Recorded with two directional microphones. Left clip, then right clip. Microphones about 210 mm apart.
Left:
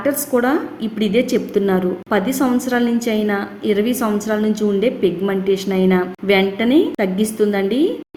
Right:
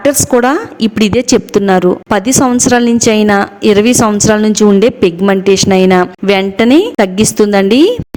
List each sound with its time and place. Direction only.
0.0 s a woman's voice: 50° right (ahead or behind)